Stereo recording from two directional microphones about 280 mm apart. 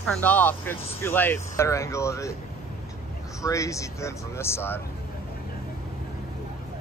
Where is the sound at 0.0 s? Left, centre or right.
Centre.